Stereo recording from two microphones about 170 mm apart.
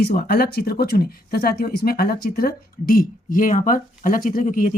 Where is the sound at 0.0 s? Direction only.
60° left (ahead or behind).